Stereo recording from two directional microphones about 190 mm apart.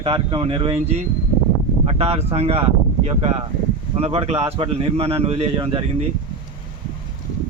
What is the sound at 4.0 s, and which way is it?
A man's voice, 30° right (ahead or behind).